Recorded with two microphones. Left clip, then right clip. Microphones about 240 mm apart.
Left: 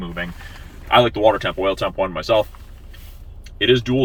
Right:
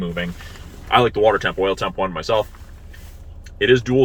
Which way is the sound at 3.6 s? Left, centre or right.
Centre.